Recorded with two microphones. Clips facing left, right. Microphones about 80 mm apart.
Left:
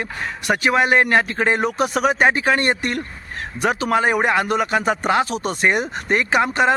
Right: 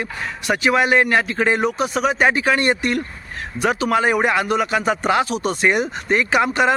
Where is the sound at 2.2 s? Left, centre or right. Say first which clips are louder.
Even; left.